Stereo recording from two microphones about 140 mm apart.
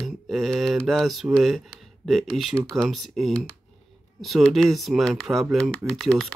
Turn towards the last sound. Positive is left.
turn(degrees=5)  # may be behind; listen again after turning